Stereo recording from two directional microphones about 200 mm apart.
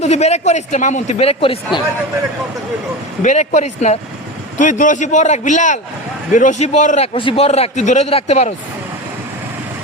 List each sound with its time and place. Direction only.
0.0 s a man's voice: 35° left (ahead or behind)
3.2 s a man's voice: 35° left (ahead or behind)